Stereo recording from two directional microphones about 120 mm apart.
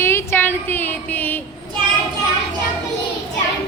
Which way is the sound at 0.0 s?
20° left (ahead or behind).